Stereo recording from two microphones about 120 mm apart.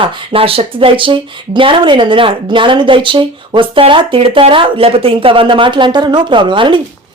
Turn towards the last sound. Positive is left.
turn(degrees=-45)  # may be behind; listen again after turning